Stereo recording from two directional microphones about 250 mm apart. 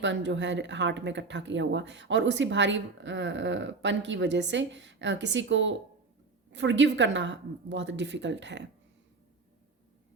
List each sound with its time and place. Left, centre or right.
0.0 s speech: right